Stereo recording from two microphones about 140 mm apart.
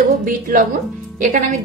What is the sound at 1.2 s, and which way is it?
Speech, 65° right (ahead or behind).